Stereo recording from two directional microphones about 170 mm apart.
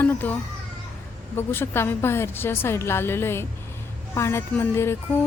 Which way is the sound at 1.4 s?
15° left (ahead or behind).